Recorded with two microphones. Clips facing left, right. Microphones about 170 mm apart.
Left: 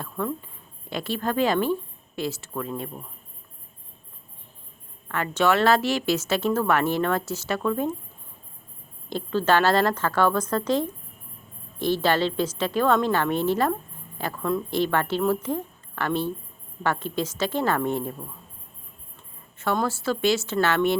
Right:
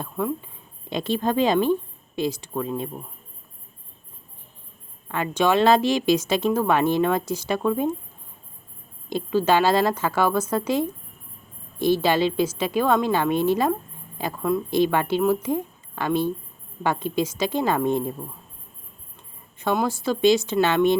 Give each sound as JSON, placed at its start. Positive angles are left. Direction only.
{"t": 0.0, "sound": "speech", "side_deg": -15}
{"t": 5.0, "sound": "a woman's voice", "side_deg": -15}
{"t": 9.0, "sound": "a woman's voice", "side_deg": -10}
{"t": 19.5, "sound": "a woman's voice", "side_deg": -15}